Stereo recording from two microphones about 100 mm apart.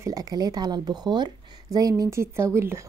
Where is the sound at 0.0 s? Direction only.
35° right (ahead or behind).